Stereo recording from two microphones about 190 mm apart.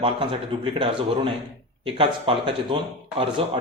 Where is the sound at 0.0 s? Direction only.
30° right (ahead or behind).